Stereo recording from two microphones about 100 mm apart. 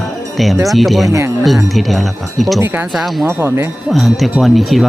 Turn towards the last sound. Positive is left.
turn(degrees=0)  # may be behind; listen again after turning